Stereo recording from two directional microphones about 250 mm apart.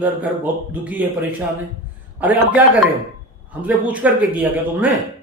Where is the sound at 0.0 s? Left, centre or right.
Centre.